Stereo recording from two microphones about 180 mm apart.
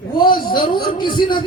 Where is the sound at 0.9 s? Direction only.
25° left (ahead or behind).